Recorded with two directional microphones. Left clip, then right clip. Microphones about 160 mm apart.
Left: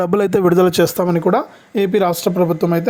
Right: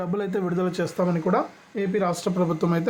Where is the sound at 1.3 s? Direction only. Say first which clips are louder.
Left 7 dB; 85° left.